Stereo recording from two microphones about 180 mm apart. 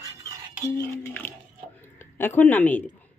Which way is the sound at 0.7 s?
10° left (ahead or behind).